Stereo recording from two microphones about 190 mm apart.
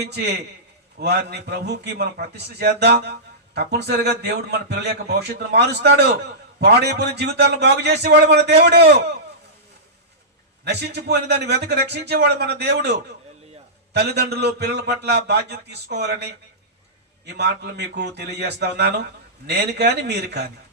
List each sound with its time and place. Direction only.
0.0 s a man's voice: 60° right (ahead or behind)
10.6 s a man's voice: 60° right (ahead or behind)